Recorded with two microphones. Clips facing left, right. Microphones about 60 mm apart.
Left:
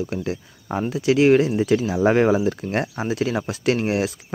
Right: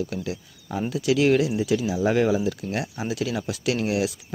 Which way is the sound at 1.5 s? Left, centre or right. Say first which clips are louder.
Left 4 dB; left.